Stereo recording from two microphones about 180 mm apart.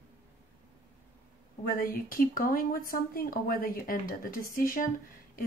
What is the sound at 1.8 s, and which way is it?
A woman's voice, 50° left (ahead or behind).